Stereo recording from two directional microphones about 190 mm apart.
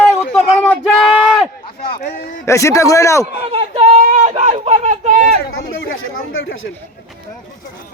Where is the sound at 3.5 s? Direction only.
30° right (ahead or behind).